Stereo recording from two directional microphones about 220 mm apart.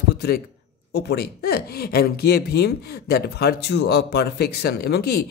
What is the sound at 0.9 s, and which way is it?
Speech, 45° left (ahead or behind).